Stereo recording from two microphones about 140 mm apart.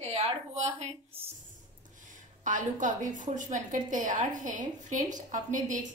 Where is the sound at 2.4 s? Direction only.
65° right (ahead or behind).